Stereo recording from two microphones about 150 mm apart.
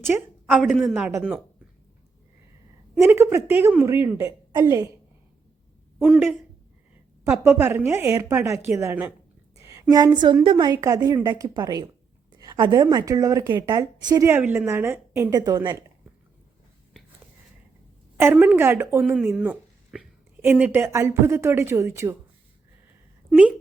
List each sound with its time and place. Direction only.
0.1 s a woman's voice: 5° right (ahead or behind)
3.0 s a woman's voice: 15° right (ahead or behind)
7.3 s a woman's voice: 15° right (ahead or behind)
9.6 s a sound: 20° right (ahead or behind)
10.4 s a woman's voice: 30° right (ahead or behind)
14.3 s a woman's voice: 10° right (ahead or behind)
18.2 s a woman's voice: 10° right (ahead or behind)
23.3 s speech: 5° right (ahead or behind)